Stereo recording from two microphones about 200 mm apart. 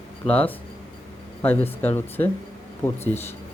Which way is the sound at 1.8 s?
10° left (ahead or behind).